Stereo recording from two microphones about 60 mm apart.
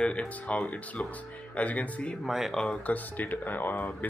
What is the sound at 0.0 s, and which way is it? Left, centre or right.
Speech, left.